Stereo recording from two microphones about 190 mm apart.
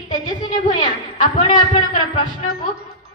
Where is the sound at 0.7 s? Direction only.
45° left (ahead or behind).